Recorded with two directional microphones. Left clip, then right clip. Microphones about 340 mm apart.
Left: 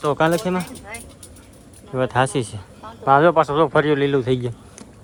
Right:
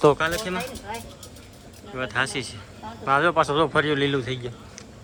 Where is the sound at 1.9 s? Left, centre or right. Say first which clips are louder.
Left 6 dB; centre.